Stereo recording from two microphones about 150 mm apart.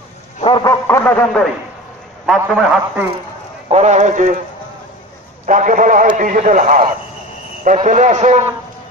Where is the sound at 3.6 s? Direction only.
50° right (ahead or behind).